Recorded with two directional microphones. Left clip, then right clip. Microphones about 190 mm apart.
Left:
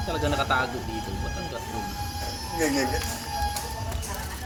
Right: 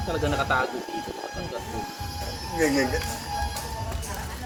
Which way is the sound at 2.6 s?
25° right (ahead or behind).